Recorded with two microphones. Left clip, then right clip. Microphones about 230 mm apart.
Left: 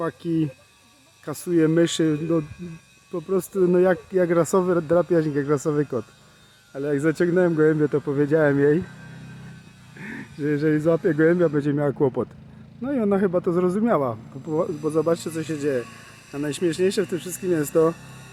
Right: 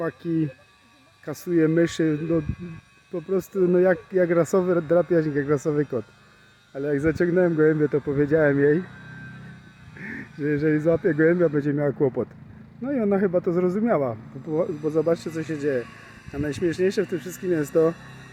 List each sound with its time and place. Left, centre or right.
0.2 s speech: centre
10.0 s speech: centre
16.8 s speech: centre
17.2 s speech: centre
17.5 s speech: centre